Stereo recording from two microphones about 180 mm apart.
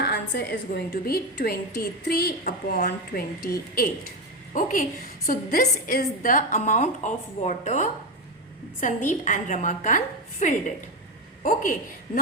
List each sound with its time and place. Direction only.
0.0 s a woman's voice: 70° left (ahead or behind); by 3.2 s 50° left (ahead or behind)
4.5 s a woman's voice: 50° left (ahead or behind)